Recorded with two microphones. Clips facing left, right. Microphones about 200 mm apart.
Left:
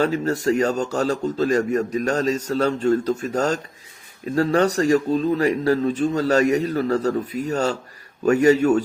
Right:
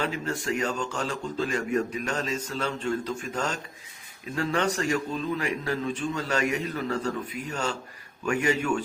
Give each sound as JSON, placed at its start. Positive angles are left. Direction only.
{"t": 0.0, "sound": "a man's voice", "side_deg": 40}